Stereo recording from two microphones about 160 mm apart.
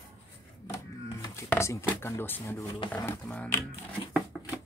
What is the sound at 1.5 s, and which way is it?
Speech, 15° left (ahead or behind).